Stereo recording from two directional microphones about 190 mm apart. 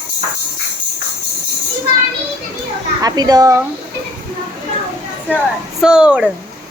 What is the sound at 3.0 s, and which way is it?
Speech, 20° right (ahead or behind).